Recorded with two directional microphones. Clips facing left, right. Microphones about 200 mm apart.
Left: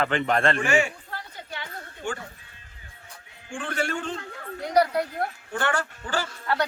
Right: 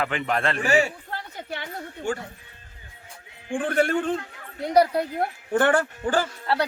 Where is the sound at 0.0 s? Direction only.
5° right (ahead or behind).